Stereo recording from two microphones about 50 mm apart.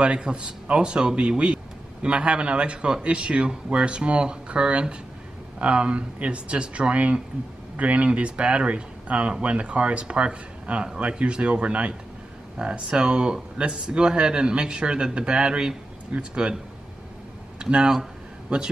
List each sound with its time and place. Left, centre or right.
0.0 s speech: centre
17.6 s speech: centre